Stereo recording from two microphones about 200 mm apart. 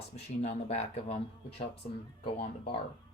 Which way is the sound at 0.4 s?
35° left (ahead or behind).